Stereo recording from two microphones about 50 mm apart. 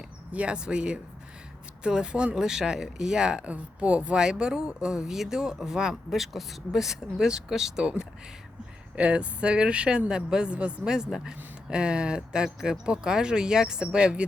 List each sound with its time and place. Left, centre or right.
0.3 s a woman's voice: right; by 7.9 s centre
9.0 s a woman's voice: right